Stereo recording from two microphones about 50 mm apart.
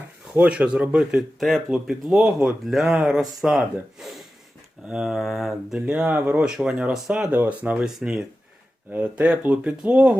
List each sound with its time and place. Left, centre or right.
0.3 s speech: right
1.4 s mantra: centre
1.7 s speech: centre
5.0 s mantra: centre
6.1 s speech: right
6.4 s speech: centre
8.9 s speech: right